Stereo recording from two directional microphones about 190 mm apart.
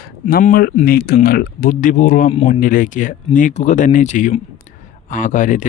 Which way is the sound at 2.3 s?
35° left (ahead or behind).